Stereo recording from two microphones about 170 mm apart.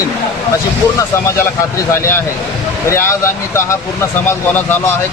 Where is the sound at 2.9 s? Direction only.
15° left (ahead or behind).